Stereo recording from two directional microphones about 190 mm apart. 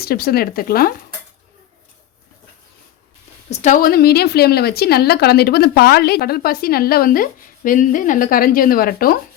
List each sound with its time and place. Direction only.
0.0 s a woman's voice: 55° left (ahead or behind)
3.5 s a woman's voice: 40° left (ahead or behind)